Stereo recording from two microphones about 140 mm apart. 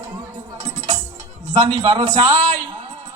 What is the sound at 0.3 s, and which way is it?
Music, 60° right (ahead or behind).